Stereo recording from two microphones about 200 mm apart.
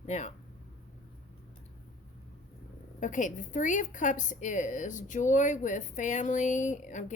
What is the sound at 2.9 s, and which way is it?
A woman's voice, 40° left (ahead or behind).